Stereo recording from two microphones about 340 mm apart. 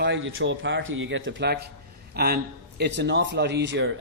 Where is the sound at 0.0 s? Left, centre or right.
Right.